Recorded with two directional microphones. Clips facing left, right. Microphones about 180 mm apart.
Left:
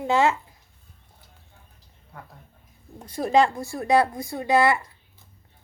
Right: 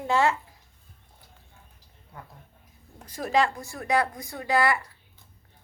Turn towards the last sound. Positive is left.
turn(degrees=25)  # may be behind; listen again after turning